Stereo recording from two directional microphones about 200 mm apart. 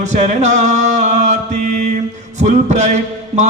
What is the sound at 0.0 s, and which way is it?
Mantra, 35° right (ahead or behind).